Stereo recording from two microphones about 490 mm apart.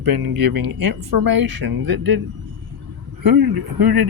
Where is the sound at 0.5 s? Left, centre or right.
Right.